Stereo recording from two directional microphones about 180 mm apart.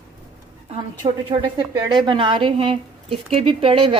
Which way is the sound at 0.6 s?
30° right (ahead or behind).